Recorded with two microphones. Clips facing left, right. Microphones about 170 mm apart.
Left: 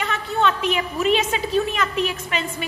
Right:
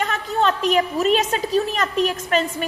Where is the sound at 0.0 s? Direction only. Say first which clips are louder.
Right 1 dB; 40° right (ahead or behind).